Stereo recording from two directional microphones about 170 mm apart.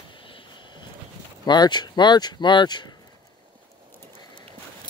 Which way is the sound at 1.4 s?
25° left (ahead or behind).